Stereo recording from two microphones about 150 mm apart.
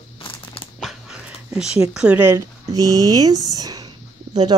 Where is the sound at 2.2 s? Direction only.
20° right (ahead or behind).